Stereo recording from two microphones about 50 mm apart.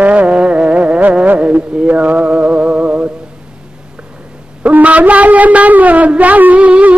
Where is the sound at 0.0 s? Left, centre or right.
Right.